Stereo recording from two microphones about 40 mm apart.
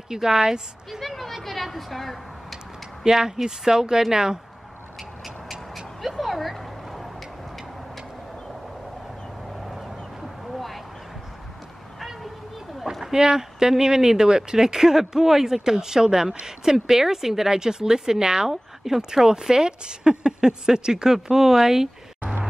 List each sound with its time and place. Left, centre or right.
0.1 s a woman's voice: centre
1.0 s speech: centre
3.0 s a woman's voice: centre
5.2 s vehicle: centre
9.7 s a sound: centre
12.0 s vehicle: centre
13.0 s a woman's voice: centre